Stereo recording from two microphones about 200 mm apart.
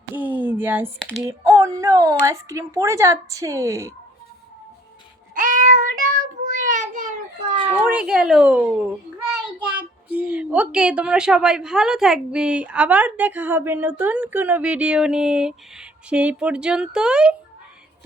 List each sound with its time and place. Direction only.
0.1 s a sound: 10° right (ahead or behind)
1.2 s speech: 15° right (ahead or behind)
5.3 s child singing: 40° right (ahead or behind)
7.9 s a woman's voice: 5° right (ahead or behind)
10.1 s a woman's voice: 5° right (ahead or behind)